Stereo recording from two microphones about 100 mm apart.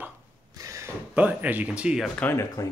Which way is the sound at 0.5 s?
30° right (ahead or behind).